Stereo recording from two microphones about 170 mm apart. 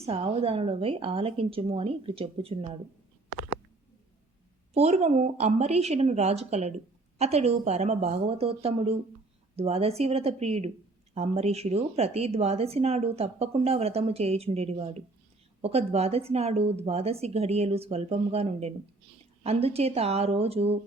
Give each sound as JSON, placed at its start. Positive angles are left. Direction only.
{"t": 0.0, "sound": "a woman's voice", "side_deg": -35}
{"t": 4.7, "sound": "a woman's voice", "side_deg": -40}